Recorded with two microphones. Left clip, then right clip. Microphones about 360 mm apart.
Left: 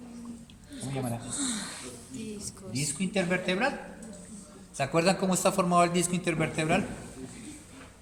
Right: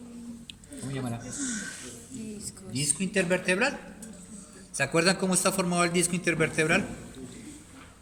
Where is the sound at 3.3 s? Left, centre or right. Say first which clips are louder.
Right 3 dB; centre.